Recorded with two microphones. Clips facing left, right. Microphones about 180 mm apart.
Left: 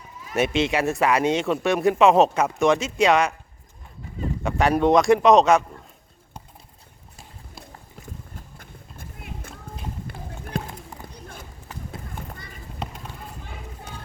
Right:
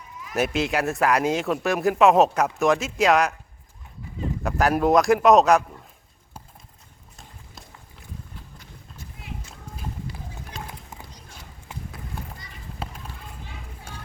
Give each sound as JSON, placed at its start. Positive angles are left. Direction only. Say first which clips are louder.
{"t": 0.3, "sound": "speech", "louder": "left 2 dB", "side_deg": 0}
{"t": 4.4, "sound": "speech", "louder": "left 1 dB", "side_deg": 0}
{"t": 7.9, "sound": "run", "louder": "left 1 dB", "side_deg": 50}